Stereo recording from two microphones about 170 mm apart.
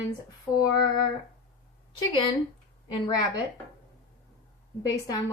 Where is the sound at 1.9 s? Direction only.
30° left (ahead or behind).